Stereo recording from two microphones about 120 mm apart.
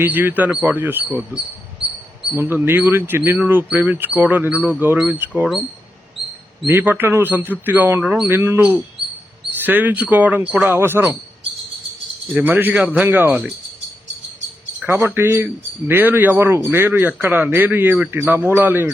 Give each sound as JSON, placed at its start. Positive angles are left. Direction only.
{"t": 0.0, "sound": "speech", "side_deg": -15}
{"t": 2.3, "sound": "speech", "side_deg": -15}
{"t": 6.7, "sound": "speech", "side_deg": -15}
{"t": 8.0, "sound": "speech", "side_deg": -5}
{"t": 8.3, "sound": "speech", "side_deg": -20}
{"t": 9.6, "sound": "speech", "side_deg": -15}
{"t": 12.3, "sound": "speech", "side_deg": -15}
{"t": 14.8, "sound": "speech", "side_deg": -20}